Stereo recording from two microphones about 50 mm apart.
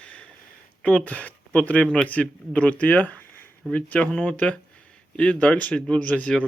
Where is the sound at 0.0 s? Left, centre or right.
Left.